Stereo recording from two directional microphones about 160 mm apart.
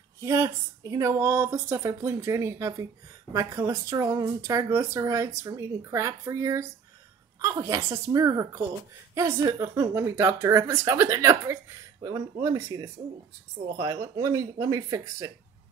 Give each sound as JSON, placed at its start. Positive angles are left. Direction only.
{"t": 0.2, "sound": "a woman's voice", "side_deg": -20}